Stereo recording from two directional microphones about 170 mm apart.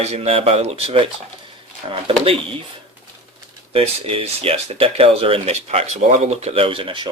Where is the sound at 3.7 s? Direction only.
35° right (ahead or behind).